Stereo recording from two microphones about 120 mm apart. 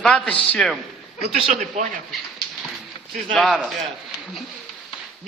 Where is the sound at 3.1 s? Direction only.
Centre (ahead or behind).